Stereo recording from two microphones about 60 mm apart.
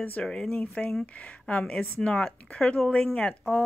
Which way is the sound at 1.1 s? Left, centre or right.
Left.